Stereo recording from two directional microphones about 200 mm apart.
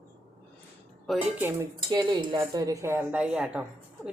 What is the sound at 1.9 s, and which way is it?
Speech, 20° right (ahead or behind).